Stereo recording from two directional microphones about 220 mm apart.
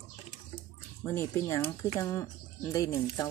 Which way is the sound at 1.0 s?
10° left (ahead or behind).